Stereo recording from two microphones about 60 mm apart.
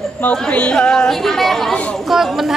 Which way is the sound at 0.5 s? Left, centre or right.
Centre.